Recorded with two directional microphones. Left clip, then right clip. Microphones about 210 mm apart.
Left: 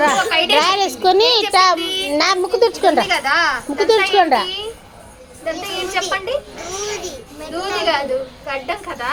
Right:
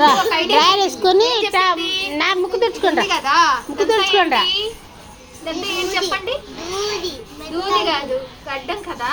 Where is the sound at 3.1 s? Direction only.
10° right (ahead or behind).